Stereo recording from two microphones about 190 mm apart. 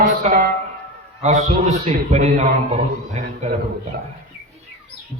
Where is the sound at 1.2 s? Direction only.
35° right (ahead or behind).